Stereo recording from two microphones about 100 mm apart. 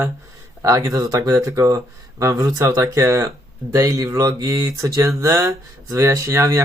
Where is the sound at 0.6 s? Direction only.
35° right (ahead or behind).